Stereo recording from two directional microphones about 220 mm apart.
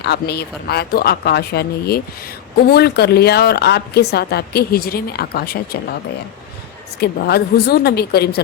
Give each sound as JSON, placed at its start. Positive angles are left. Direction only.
{"t": 0.0, "sound": "speech", "side_deg": 50}
{"t": 7.0, "sound": "speech", "side_deg": 45}